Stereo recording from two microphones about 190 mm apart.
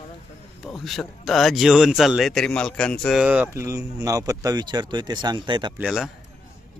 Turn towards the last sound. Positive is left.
turn(degrees=0)  # may be behind; listen again after turning